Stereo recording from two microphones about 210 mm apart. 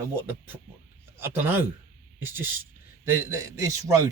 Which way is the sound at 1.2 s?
10° right (ahead or behind).